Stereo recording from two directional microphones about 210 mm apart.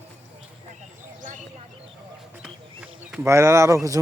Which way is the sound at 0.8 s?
35° right (ahead or behind).